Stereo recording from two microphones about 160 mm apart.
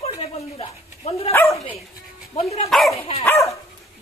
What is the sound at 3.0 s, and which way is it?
Speech, 40° left (ahead or behind).